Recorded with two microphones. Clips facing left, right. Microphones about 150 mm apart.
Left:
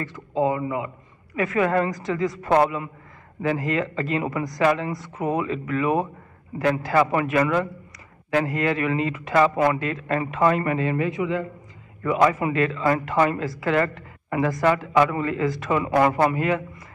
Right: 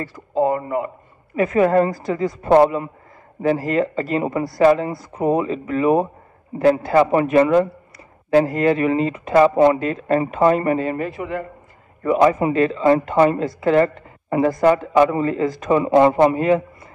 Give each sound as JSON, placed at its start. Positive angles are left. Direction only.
{"t": 0.1, "sound": "speech", "side_deg": -45}
{"t": 1.4, "sound": "a woman's voice", "side_deg": -30}